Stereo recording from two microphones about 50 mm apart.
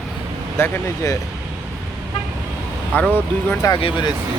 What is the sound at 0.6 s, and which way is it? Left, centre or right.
Speech, left.